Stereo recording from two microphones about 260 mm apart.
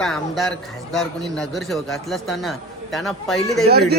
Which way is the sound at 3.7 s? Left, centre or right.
Right.